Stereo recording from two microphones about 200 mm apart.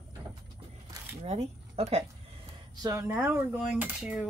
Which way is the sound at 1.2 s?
30° right (ahead or behind).